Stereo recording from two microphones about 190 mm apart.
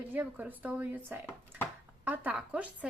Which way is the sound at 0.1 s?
10° right (ahead or behind).